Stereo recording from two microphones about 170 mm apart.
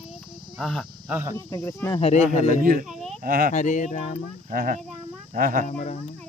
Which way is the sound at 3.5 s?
45° left (ahead or behind).